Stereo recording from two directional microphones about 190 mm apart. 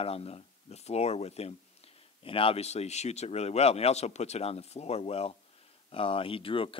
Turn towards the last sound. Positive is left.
turn(degrees=30)  # may be behind; listen again after turning